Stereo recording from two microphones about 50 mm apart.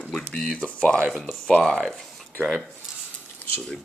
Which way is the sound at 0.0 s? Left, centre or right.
Centre.